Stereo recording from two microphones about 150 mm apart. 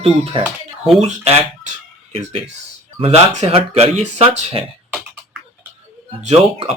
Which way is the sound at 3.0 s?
40° right (ahead or behind).